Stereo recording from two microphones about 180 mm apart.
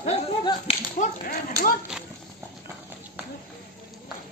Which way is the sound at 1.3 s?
50° left (ahead or behind).